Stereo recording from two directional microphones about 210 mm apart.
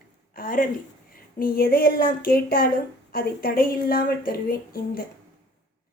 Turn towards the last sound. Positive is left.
turn(degrees=45)  # may be behind; listen again after turning